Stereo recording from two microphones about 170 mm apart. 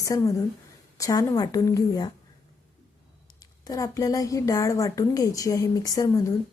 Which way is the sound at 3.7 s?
20° left (ahead or behind).